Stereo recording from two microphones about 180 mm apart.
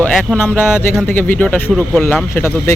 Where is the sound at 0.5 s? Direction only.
10° left (ahead or behind).